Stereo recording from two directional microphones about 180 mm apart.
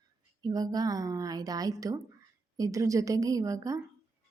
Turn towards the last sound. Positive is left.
turn(degrees=-20)  # may be behind; listen again after turning